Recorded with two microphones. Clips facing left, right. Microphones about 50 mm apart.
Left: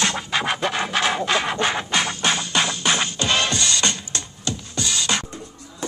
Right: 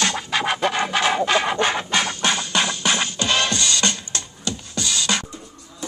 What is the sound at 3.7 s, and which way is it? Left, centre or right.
Music, left.